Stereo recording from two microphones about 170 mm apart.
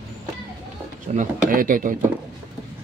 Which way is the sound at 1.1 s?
50° right (ahead or behind).